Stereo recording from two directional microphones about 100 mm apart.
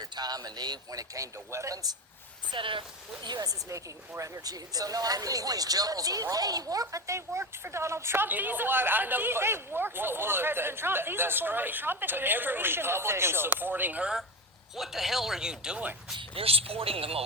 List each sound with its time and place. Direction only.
0.0 s speech: 40° right (ahead or behind)
2.5 s speech: 55° right (ahead or behind)
3.2 s speech: 40° right (ahead or behind); by 14.1 s 15° right (ahead or behind)
14.8 s speech: 5° right (ahead or behind)
16.1 s speech: 70° right (ahead or behind)